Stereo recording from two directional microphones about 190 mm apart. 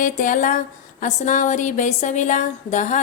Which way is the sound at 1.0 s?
40° left (ahead or behind).